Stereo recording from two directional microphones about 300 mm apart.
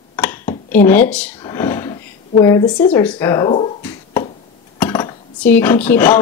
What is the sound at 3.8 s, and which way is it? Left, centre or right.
Finger snapping, centre.